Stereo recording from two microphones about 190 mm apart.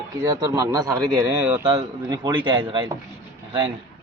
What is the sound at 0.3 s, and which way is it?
A man's voice, 15° right (ahead or behind).